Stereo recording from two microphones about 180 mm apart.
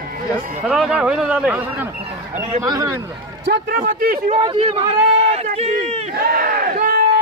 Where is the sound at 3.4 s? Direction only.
65° right (ahead or behind).